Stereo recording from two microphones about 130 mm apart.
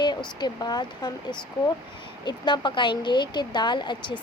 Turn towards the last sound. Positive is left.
turn(degrees=35)  # may be behind; listen again after turning